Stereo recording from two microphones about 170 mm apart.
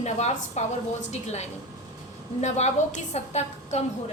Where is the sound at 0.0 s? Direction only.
40° left (ahead or behind).